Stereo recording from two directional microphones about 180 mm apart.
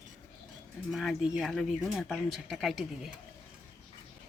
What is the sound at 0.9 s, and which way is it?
Speech, centre (ahead or behind).